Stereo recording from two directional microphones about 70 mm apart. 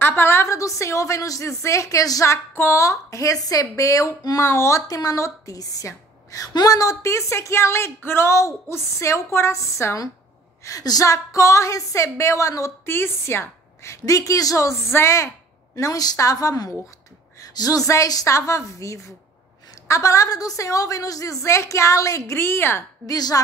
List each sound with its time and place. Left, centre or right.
0.0 s a woman's voice: left
2.3 s speech: left
4.4 s a woman's voice: left
4.8 s a woman's voice: left
10.6 s speech: left
12.8 s speech: left
14.9 s a woman's voice: left
15.7 s a woman's voice: left
22.4 s a woman's voice: left
23.0 s a woman's voice: left